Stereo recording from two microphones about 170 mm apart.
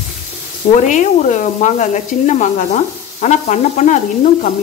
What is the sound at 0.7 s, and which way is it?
Sizzle, 45° left (ahead or behind).